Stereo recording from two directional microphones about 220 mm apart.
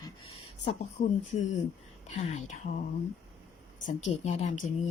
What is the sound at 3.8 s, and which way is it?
Speech, 30° left (ahead or behind).